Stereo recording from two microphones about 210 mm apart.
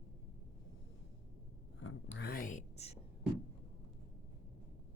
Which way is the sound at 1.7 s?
80° left.